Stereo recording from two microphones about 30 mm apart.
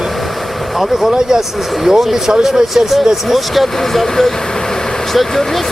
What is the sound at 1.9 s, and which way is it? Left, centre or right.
Speech, centre.